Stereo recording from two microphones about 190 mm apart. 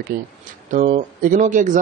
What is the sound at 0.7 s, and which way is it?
Speech, 40° right (ahead or behind).